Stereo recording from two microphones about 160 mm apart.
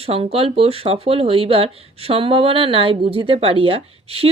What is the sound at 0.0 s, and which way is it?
Speech, 35° right (ahead or behind).